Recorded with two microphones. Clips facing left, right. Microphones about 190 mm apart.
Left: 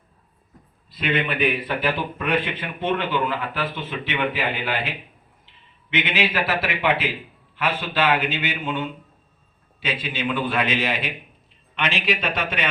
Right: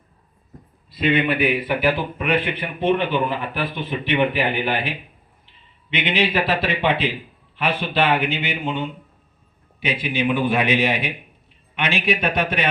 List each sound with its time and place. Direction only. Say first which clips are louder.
1.4 s a man's voice: right 3 dB; 10° right (ahead or behind)